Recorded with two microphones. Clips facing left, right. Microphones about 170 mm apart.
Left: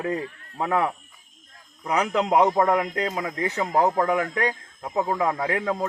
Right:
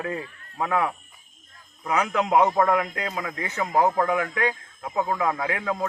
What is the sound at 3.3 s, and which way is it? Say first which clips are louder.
Speech: even; 35° left (ahead or behind).